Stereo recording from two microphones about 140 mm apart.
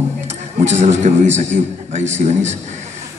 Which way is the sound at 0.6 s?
55° right (ahead or behind).